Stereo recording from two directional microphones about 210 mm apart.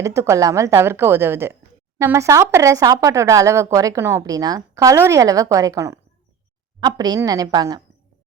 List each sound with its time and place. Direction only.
0.0 s speech: 15° right (ahead or behind)